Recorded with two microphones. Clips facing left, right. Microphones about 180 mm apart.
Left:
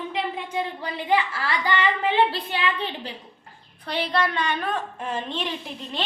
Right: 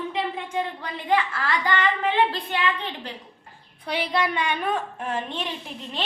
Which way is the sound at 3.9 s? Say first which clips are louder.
Even; 10° right (ahead or behind).